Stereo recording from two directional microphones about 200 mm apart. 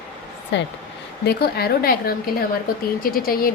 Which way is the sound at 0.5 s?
60° left (ahead or behind).